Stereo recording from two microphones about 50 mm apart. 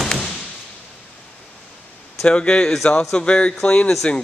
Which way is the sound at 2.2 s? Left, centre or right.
Centre.